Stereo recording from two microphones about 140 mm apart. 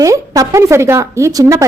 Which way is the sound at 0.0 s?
25° right (ahead or behind).